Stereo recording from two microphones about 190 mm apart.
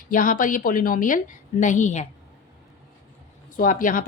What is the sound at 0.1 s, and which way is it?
A woman's voice, 45° left (ahead or behind).